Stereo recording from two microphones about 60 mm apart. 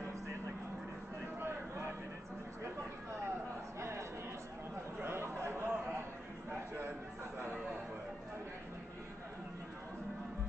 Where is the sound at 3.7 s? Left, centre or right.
Right.